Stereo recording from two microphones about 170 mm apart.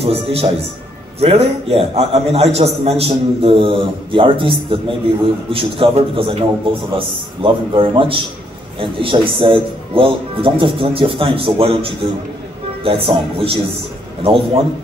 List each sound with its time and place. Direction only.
0.0 s a man's voice: 35° right (ahead or behind)